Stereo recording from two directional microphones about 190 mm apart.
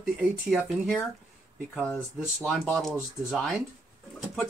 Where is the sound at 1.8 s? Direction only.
10° left (ahead or behind).